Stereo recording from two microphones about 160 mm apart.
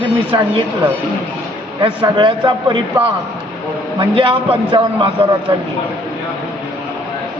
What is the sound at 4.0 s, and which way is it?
A man's voice, 35° right (ahead or behind).